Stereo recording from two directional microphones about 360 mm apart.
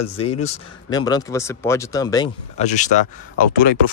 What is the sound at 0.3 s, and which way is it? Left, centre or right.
Speech, centre.